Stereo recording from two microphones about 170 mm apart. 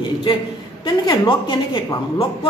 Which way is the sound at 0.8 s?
25° left (ahead or behind).